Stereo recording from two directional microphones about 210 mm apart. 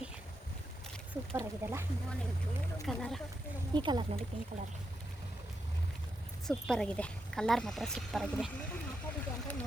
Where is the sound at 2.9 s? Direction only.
Centre (ahead or behind).